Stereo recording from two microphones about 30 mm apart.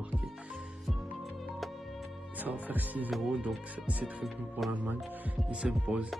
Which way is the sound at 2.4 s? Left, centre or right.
Right.